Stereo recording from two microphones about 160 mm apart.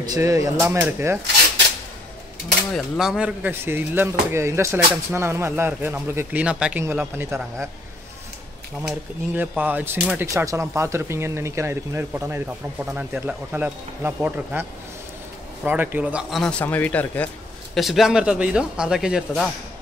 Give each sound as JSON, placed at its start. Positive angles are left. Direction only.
{"t": 0.0, "sound": "speech", "side_deg": -20}
{"t": 2.7, "sound": "speech", "side_deg": -5}
{"t": 8.8, "sound": "speech", "side_deg": -10}
{"t": 17.7, "sound": "speech", "side_deg": 0}